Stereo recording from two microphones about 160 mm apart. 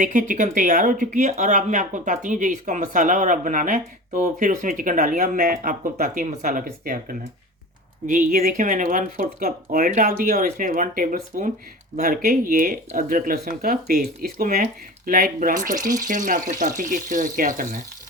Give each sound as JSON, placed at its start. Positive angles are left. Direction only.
{"t": 0.0, "sound": "speech", "side_deg": -55}